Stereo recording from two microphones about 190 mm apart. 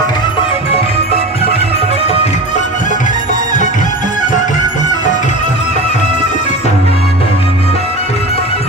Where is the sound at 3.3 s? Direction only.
20° right (ahead or behind).